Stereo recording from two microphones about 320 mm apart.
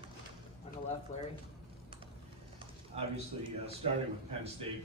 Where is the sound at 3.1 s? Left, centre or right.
Centre.